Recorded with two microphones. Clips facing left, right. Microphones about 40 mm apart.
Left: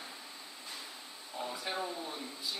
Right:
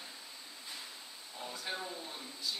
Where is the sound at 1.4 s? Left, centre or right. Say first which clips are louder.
Left 4 dB; centre.